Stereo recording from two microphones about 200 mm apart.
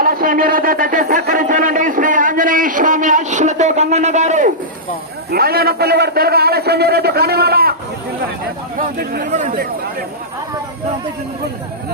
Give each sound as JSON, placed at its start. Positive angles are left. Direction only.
{"t": 0.0, "sound": "a man's voice", "side_deg": -45}
{"t": 5.3, "sound": "a man's voice", "side_deg": -50}
{"t": 9.0, "sound": "a man's voice", "side_deg": -50}
{"t": 9.3, "sound": "a man's voice", "side_deg": -35}